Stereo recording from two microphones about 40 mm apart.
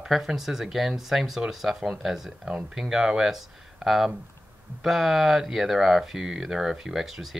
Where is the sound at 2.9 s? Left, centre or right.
Centre.